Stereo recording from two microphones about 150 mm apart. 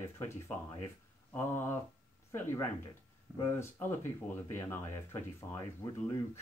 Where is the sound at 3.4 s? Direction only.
15° left (ahead or behind).